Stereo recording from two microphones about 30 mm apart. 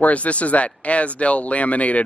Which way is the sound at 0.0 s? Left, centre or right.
Left.